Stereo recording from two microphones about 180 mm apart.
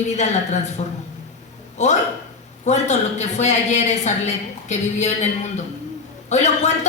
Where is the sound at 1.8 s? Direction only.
40° left (ahead or behind).